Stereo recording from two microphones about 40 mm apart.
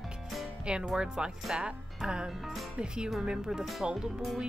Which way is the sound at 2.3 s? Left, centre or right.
Centre.